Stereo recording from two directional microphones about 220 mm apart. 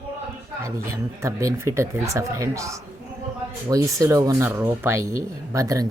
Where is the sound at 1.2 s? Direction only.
15° right (ahead or behind).